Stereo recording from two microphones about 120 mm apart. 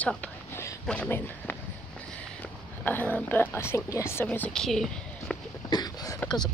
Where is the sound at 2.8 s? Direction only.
15° left (ahead or behind).